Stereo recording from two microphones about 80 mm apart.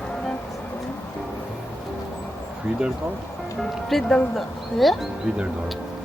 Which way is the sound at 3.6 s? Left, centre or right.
Centre.